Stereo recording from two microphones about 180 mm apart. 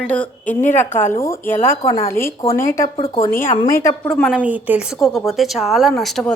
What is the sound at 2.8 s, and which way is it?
Speech, 30° left (ahead or behind).